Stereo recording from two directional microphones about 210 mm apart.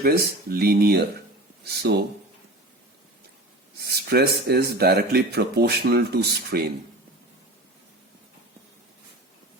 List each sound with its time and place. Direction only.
0.0 s speech: 45° right (ahead or behind)
3.8 s speech: 50° right (ahead or behind)